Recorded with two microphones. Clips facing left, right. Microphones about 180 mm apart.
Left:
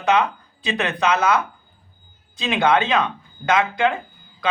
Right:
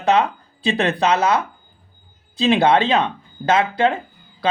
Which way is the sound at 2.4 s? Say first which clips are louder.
Right 4 dB; 35° right (ahead or behind).